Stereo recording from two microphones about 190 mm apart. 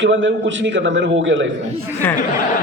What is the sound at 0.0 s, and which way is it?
A man's voice, 75° right (ahead or behind).